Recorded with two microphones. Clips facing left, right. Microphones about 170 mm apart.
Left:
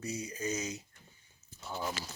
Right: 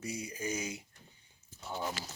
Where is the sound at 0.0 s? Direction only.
10° right (ahead or behind).